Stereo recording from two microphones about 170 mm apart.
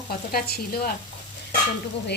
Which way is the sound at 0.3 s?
60° left (ahead or behind).